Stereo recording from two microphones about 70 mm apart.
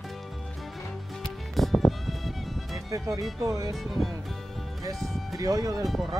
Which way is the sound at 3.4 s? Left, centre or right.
Right.